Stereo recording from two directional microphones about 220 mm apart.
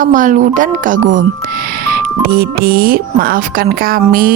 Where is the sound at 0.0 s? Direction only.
35° right (ahead or behind).